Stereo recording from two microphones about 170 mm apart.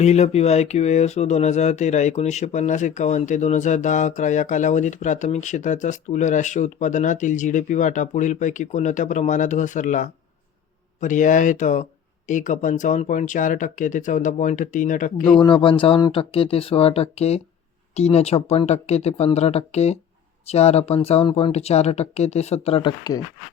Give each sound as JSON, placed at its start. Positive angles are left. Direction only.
{"t": 0.0, "sound": "speech", "side_deg": 40}
{"t": 15.4, "sound": "speech", "side_deg": 30}